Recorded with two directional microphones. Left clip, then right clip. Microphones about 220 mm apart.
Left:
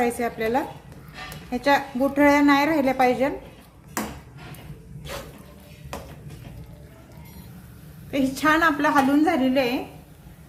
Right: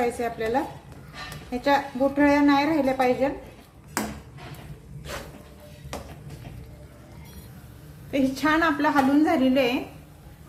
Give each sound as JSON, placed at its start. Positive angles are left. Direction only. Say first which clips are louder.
{"t": 0.2, "sound": "a woman's voice", "louder": "left 2 dB", "side_deg": 15}
{"t": 8.1, "sound": "a woman's voice", "louder": "left 2 dB", "side_deg": 10}